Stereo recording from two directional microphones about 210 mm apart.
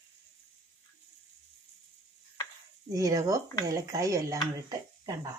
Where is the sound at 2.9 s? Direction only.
15° right (ahead or behind).